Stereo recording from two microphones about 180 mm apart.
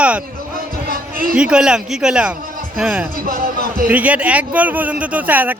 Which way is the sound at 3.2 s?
55° right (ahead or behind).